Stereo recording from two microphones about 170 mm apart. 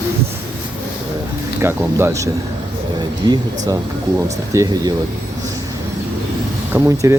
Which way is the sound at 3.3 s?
20° right (ahead or behind).